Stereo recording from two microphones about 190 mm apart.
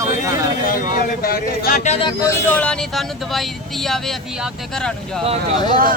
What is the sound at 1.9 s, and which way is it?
Speech, 30° left (ahead or behind).